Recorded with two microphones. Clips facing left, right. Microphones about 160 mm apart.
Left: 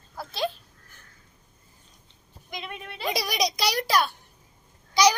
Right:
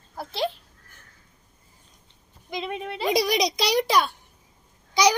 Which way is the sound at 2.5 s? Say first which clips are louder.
Right 7 dB; 30° right (ahead or behind).